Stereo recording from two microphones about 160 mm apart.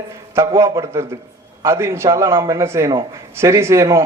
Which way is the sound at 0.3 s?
20° right (ahead or behind).